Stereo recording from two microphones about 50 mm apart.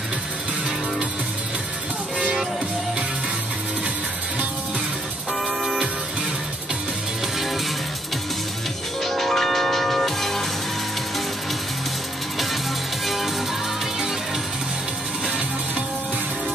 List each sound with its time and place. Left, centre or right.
2.1 s music: centre
5.6 s music: centre
9.0 s music: centre
13.0 s music: centre